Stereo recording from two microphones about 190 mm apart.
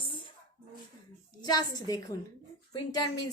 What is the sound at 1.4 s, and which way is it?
Speech, 20° left (ahead or behind).